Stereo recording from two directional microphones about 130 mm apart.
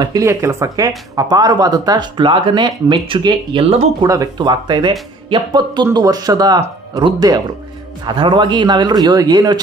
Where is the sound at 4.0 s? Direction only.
30° right (ahead or behind).